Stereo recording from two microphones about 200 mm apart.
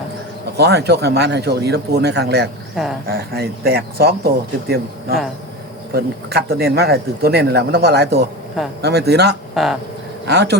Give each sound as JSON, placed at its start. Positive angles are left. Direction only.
{"t": 0.5, "sound": "speech", "side_deg": -55}
{"t": 2.7, "sound": "cricket", "side_deg": 0}
{"t": 3.1, "sound": "speech", "side_deg": -50}
{"t": 5.9, "sound": "speech", "side_deg": -50}
{"t": 9.6, "sound": "cricket", "side_deg": 0}
{"t": 10.2, "sound": "speech", "side_deg": -55}